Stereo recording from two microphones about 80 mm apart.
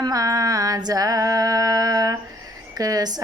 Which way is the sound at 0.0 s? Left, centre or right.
Right.